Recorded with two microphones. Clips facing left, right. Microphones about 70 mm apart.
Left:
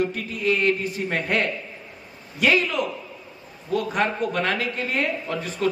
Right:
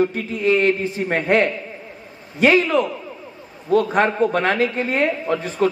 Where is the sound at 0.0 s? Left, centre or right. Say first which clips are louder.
Right 5 dB; right.